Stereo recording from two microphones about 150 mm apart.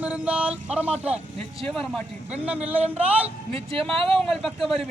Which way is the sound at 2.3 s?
10° right (ahead or behind).